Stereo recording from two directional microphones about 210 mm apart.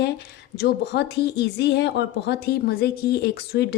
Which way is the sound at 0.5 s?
50° left (ahead or behind).